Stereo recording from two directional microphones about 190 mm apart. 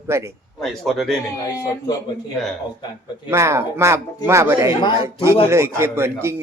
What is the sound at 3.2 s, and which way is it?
Speech, 15° right (ahead or behind).